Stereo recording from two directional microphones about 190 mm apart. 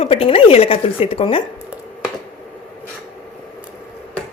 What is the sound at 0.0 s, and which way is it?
A woman's voice, 30° left (ahead or behind).